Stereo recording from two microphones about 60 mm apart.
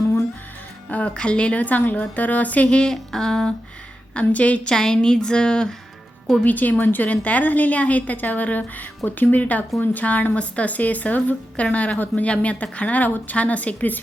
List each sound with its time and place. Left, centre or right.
0.9 s a woman's voice: left
2.9 s a woman's voice: centre
4.1 s a woman's voice: left
4.7 s a woman's voice: centre
6.4 s a woman's voice: left